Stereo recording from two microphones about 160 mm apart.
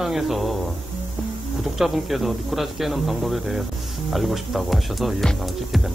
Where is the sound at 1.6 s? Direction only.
Centre (ahead or behind).